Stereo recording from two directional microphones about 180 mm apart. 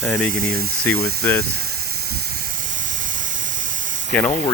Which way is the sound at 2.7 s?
45° right (ahead or behind).